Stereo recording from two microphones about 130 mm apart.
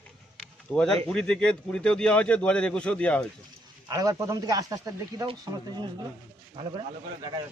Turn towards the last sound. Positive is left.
turn(degrees=-35)  # may be behind; listen again after turning